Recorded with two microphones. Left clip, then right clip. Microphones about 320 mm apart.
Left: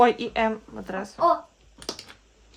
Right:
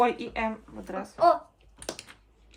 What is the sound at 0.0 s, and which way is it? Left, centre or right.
Speech, left.